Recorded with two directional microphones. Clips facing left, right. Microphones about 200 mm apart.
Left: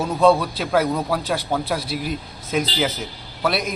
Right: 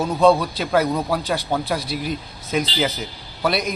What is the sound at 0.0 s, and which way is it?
A man's voice, 5° left (ahead or behind).